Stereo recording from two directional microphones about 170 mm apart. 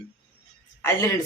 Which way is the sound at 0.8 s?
15° left (ahead or behind).